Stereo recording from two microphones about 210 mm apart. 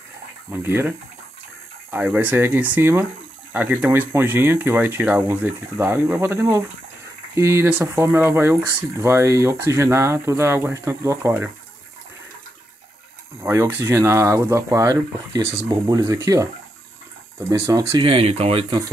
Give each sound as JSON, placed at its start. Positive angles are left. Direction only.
{"t": 0.5, "sound": "speech", "side_deg": -10}
{"t": 13.4, "sound": "speech", "side_deg": -10}
{"t": 17.6, "sound": "speech", "side_deg": -15}